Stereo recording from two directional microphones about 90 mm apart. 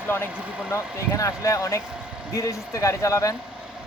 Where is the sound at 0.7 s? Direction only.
35° left (ahead or behind).